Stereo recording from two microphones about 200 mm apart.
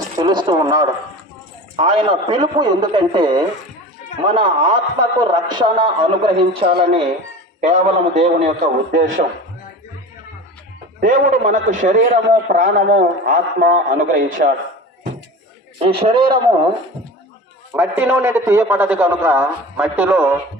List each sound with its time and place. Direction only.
0.2 s a man's voice: 20° right (ahead or behind); by 9.2 s 40° right (ahead or behind)
11.0 s a man's voice: 45° right (ahead or behind)
15.8 s a man's voice: 30° right (ahead or behind)
17.7 s a man's voice: 10° right (ahead or behind)